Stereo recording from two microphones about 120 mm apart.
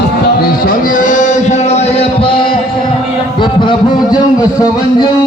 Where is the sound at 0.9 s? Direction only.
90° left; by 2.6 s 45° left (ahead or behind).